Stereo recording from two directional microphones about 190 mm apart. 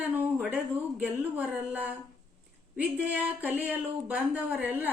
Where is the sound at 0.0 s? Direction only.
10° right (ahead or behind).